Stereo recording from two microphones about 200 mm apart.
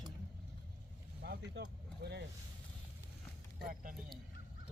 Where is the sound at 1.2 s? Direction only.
55° right (ahead or behind).